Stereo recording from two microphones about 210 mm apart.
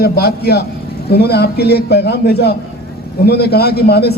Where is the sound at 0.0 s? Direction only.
50° left (ahead or behind).